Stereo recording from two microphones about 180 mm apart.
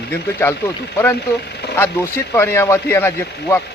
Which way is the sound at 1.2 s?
65° left (ahead or behind).